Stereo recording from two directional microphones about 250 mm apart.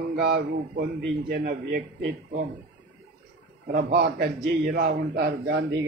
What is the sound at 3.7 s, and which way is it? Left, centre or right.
Speech, right.